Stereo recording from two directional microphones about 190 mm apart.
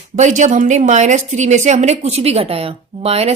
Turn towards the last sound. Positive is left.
turn(degrees=-35)  # may be behind; listen again after turning